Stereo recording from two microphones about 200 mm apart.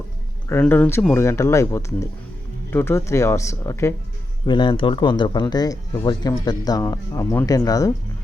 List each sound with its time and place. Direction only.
0.4 s speech: 10° left (ahead or behind)